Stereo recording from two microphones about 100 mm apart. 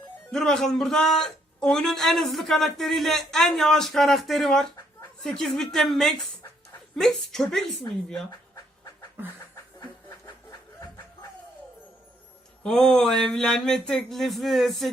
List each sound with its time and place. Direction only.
0.3 s speech: 5° left (ahead or behind)
10.8 s snicker: 30° left (ahead or behind)
12.6 s a sound: 5° left (ahead or behind)